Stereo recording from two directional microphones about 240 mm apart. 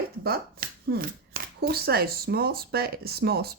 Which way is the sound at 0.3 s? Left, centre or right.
Right.